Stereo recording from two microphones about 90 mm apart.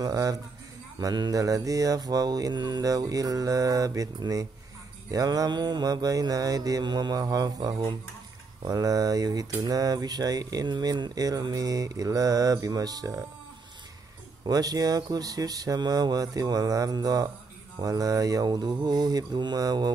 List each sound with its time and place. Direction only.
0.0 s mantra: 40° right (ahead or behind)
0.9 s speech: 45° right (ahead or behind)
1.4 s mantra: 40° right (ahead or behind)
5.1 s speech: 40° right (ahead or behind)
14.4 s speech: 45° right (ahead or behind)